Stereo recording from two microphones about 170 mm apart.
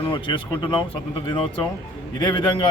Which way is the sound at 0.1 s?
25° left (ahead or behind).